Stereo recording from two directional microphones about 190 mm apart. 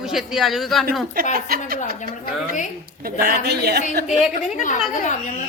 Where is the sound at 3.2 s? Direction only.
55° right (ahead or behind).